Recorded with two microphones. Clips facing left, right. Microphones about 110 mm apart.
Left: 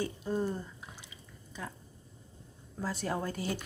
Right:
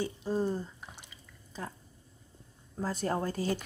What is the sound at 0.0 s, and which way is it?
Speech, 30° right (ahead or behind).